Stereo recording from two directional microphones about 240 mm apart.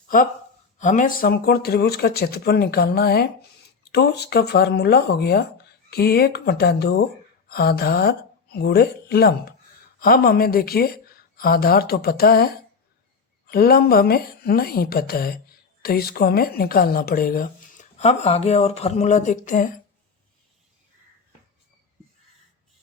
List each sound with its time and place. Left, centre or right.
0.8 s speech: left